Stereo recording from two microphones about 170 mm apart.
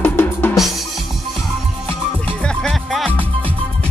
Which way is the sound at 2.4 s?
5° left (ahead or behind).